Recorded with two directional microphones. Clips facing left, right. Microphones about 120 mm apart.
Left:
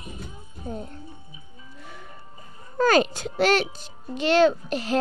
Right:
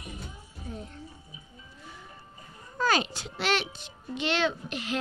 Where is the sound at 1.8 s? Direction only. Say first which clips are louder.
Left 4 dB; 65° left (ahead or behind).